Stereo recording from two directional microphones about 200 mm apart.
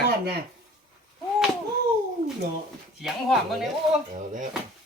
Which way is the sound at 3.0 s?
Centre (ahead or behind).